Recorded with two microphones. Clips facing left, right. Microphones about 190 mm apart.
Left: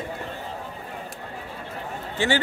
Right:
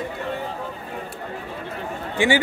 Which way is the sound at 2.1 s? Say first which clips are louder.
Right 4 dB; 10° right (ahead or behind).